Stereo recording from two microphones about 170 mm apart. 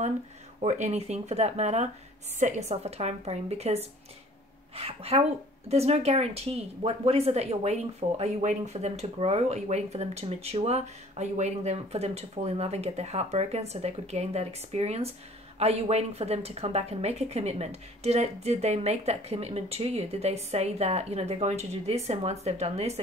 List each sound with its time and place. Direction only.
0.6 s speech: 45° right (ahead or behind)